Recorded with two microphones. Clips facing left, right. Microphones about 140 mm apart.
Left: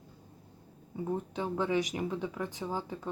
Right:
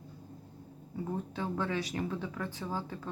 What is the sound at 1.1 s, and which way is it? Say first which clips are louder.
Speech: left 2 dB; 15° left (ahead or behind).